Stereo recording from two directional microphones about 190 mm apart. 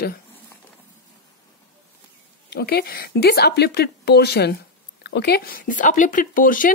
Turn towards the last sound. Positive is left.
turn(degrees=45)  # may be behind; listen again after turning